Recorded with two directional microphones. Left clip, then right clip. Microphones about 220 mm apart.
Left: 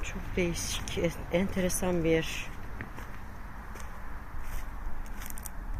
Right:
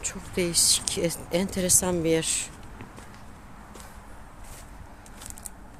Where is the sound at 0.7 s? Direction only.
15° right (ahead or behind).